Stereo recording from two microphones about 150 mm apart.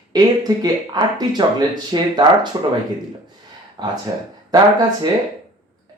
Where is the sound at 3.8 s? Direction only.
30° right (ahead or behind).